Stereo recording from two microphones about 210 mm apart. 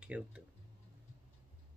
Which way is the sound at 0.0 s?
5° right (ahead or behind).